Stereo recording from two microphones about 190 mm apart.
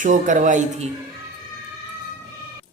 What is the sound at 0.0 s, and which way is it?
Speech, 40° right (ahead or behind).